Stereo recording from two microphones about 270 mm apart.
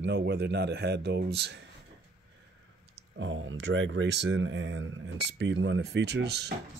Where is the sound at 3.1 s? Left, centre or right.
Right.